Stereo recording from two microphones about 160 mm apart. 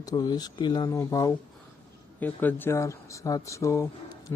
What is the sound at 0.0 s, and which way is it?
Speech, 25° left (ahead or behind).